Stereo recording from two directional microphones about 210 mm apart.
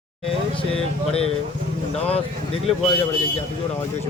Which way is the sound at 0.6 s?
30° left (ahead or behind).